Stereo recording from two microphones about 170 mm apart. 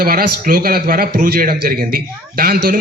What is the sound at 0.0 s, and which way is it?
A man's voice, 60° right (ahead or behind).